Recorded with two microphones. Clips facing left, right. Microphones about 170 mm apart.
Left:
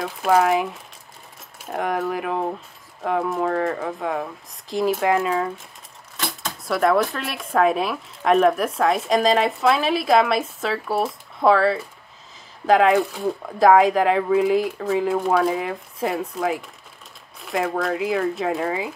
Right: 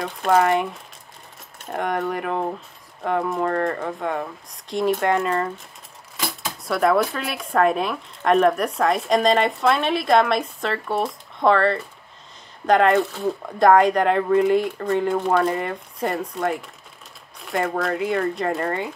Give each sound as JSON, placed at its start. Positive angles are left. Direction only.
{"t": 0.0, "sound": "speech", "side_deg": 0}